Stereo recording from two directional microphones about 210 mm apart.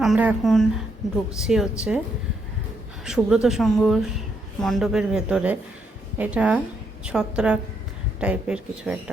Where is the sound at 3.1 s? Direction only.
5° right (ahead or behind).